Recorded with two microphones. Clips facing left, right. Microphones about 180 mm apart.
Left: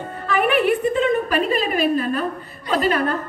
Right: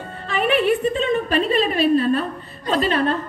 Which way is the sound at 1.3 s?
30° right (ahead or behind).